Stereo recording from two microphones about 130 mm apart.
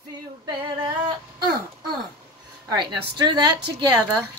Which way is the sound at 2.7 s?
35° right (ahead or behind).